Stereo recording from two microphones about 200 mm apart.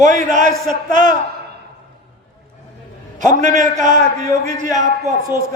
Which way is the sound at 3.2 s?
40° right (ahead or behind).